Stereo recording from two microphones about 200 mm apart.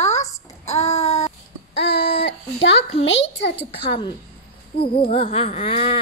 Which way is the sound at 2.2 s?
65° left (ahead or behind).